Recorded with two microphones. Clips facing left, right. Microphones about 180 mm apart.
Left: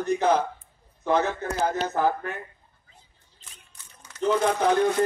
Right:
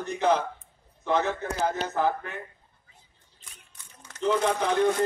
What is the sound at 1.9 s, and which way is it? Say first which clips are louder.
Speech: left 2 dB; 45° left (ahead or behind).